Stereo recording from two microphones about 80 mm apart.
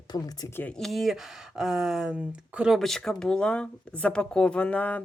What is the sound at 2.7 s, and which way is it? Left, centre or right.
Speech, centre.